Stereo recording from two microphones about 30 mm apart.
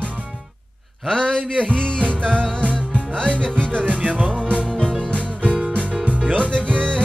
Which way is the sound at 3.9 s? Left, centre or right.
Right.